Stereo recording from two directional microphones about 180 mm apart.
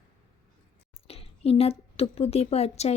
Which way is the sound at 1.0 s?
35° left (ahead or behind).